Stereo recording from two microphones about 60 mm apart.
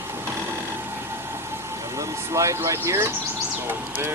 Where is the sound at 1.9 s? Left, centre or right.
Right.